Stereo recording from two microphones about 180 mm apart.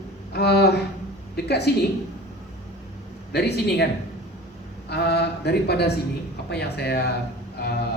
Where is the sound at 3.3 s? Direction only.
65° left (ahead or behind).